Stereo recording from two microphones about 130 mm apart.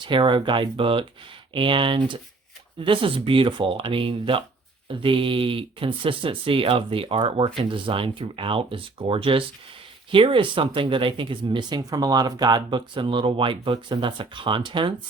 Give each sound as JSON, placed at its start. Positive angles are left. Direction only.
{"t": 0.0, "sound": "speech", "side_deg": -40}